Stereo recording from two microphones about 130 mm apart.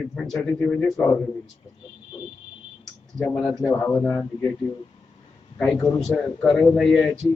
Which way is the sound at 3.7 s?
15° left (ahead or behind).